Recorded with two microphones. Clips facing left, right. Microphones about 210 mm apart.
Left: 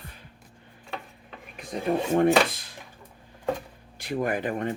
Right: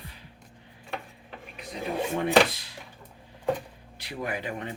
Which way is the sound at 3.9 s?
50° left (ahead or behind).